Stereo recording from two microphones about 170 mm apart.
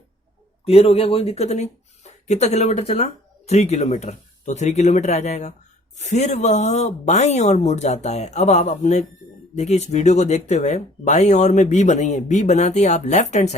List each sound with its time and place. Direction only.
0.6 s speech: 35° left (ahead or behind)